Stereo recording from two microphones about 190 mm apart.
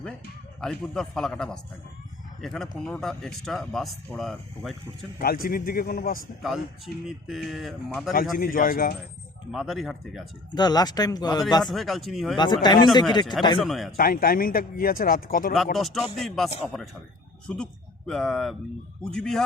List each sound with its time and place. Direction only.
0.6 s speech: 5° left (ahead or behind)
5.2 s speech: 50° left (ahead or behind)
6.4 s speech: centre (ahead or behind)
8.4 s speech: 50° left (ahead or behind)
9.5 s speech: centre (ahead or behind)
10.5 s speech: 20° left (ahead or behind)
11.6 s speech: centre (ahead or behind)
12.6 s speech: 20° left (ahead or behind)
13.6 s speech: centre (ahead or behind)
13.9 s speech: 50° left (ahead or behind)
15.5 s speech: centre (ahead or behind)